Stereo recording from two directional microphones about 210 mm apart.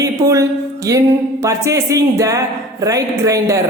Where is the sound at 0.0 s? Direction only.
15° right (ahead or behind).